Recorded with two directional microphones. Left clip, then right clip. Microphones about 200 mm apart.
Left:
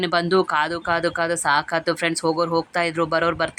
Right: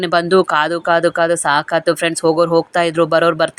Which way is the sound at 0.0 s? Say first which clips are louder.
Right 6 dB; 20° right (ahead or behind).